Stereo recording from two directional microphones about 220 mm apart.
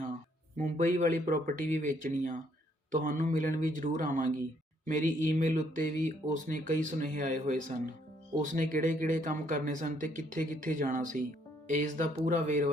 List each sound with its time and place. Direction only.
0.5 s speech: 35° right (ahead or behind)